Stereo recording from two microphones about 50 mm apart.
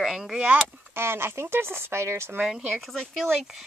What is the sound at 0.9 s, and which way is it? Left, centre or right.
Speech, right.